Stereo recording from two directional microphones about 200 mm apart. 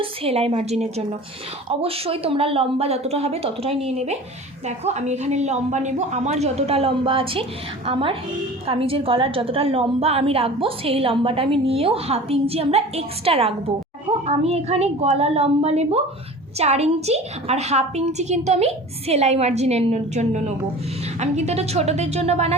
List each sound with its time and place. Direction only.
0.0 s a woman's voice: 30° right (ahead or behind)